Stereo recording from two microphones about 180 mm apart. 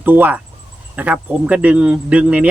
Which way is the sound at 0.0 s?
10° right (ahead or behind).